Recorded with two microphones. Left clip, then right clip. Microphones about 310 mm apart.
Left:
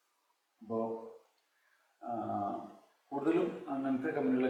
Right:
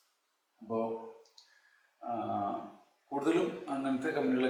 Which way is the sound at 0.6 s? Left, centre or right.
Centre.